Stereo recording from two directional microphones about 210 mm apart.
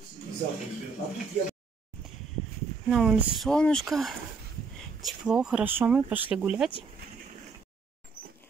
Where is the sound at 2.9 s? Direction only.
Centre (ahead or behind).